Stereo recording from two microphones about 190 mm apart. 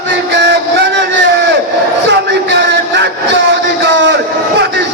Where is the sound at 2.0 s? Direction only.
65° right (ahead or behind).